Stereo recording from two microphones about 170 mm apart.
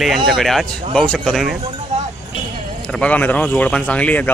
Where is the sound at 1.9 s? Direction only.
45° right (ahead or behind).